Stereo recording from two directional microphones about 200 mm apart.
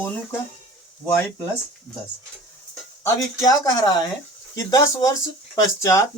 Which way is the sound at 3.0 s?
20° left (ahead or behind).